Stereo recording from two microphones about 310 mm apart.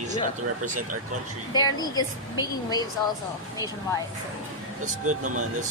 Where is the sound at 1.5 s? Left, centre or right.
Centre.